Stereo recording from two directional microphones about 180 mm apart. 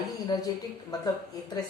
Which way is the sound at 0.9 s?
20° left (ahead or behind).